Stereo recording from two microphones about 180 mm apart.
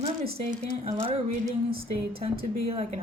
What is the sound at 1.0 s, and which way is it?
Speech, 30° right (ahead or behind).